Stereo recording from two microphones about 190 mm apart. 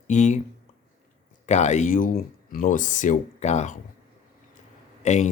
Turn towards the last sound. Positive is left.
turn(degrees=35)  # may be behind; listen again after turning